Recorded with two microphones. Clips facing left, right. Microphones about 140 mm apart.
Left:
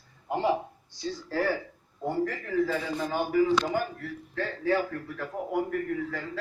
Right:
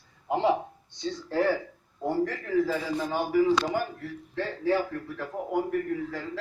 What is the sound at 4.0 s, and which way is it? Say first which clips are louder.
Speech: right 1 dB; 25° right (ahead or behind).